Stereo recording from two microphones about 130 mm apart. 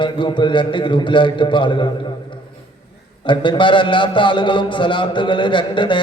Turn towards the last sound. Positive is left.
turn(degrees=40)  # may be behind; listen again after turning